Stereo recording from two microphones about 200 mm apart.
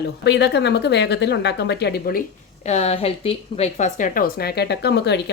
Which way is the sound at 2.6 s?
30° left (ahead or behind).